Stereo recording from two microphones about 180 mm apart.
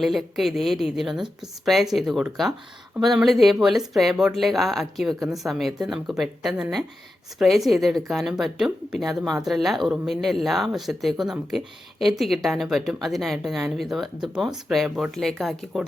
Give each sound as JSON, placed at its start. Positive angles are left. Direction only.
{"t": 0.0, "sound": "speech", "side_deg": 0}